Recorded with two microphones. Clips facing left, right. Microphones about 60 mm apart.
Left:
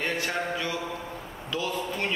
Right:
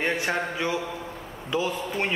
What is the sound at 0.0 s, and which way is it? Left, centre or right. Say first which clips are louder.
A man's voice: right 3 dB; right.